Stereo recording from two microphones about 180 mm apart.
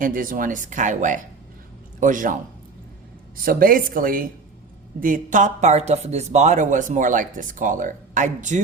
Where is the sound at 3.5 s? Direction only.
50° right (ahead or behind).